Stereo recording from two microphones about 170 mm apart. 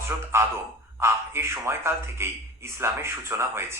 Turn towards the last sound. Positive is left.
turn(degrees=-15)  # may be behind; listen again after turning